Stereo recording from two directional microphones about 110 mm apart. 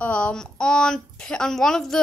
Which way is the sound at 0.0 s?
10° left (ahead or behind).